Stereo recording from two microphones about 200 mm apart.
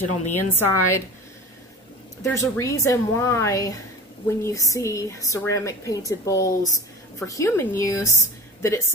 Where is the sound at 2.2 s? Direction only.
15° left (ahead or behind).